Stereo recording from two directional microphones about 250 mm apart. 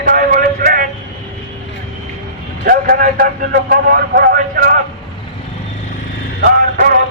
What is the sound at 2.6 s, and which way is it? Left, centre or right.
A man's voice, right.